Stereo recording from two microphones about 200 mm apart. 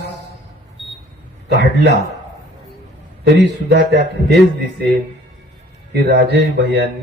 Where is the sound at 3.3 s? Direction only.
60° right (ahead or behind).